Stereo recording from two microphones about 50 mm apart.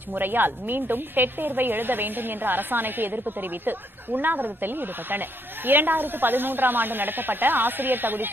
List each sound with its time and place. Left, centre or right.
0.1 s a woman's voice: right